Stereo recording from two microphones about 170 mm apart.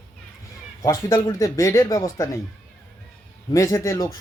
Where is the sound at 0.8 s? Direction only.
20° left (ahead or behind).